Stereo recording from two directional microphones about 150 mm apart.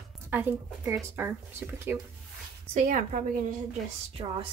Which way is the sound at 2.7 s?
55° right (ahead or behind).